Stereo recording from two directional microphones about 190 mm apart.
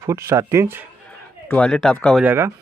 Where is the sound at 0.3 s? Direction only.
15° right (ahead or behind).